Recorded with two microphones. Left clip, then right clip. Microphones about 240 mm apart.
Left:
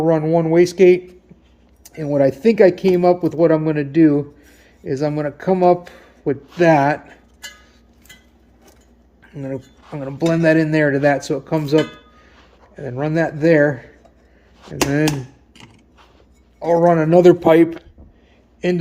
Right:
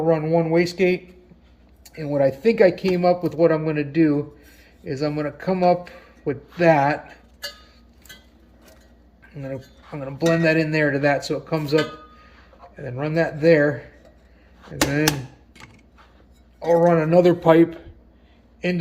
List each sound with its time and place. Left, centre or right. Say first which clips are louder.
0.0 s speech: left 3 dB; left
9.2 s speech: left 4 dB; left
16.8 s speech: left 6 dB; left